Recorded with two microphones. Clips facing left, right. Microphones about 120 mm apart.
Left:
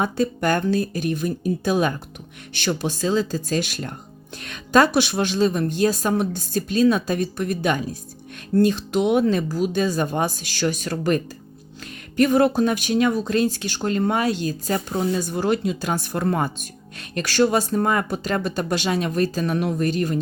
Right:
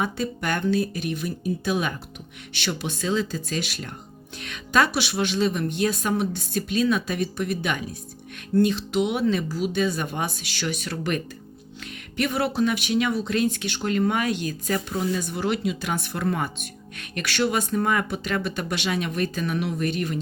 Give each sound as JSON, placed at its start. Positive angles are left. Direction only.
{"t": 0.0, "sound": "speech", "side_deg": 40}